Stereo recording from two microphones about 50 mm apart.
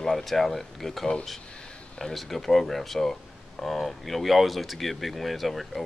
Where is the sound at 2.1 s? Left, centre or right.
Centre.